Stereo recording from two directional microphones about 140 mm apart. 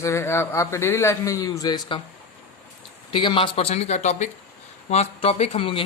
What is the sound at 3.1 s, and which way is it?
Speech, 35° left (ahead or behind).